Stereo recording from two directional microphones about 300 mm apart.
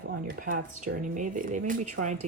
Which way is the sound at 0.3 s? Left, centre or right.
Right.